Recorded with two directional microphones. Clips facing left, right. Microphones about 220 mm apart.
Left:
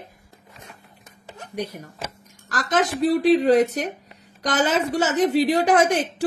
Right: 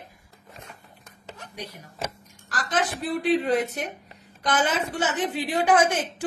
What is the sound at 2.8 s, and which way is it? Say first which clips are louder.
A woman's voice: left 10 dB; 40° left (ahead or behind).